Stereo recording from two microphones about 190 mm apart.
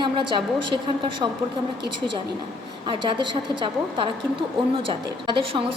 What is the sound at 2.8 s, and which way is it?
A woman's voice, 25° right (ahead or behind).